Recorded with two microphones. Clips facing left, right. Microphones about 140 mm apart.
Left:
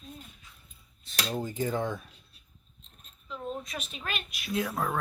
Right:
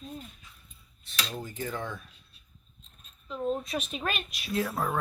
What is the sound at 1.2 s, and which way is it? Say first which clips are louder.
Cutlery: left 7 dB; 25° left (ahead or behind).